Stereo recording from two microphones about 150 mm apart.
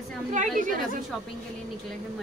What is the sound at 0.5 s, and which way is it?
Speech, 65° right (ahead or behind).